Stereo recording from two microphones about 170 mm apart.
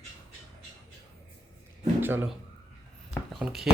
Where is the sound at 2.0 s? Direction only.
10° right (ahead or behind).